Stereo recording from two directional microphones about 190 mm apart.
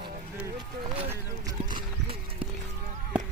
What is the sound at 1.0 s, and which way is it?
Speech, 10° right (ahead or behind).